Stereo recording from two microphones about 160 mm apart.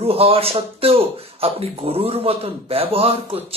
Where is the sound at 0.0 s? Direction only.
35° right (ahead or behind).